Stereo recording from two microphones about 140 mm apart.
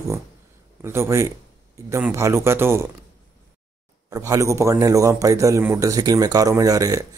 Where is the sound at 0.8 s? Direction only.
20° right (ahead or behind).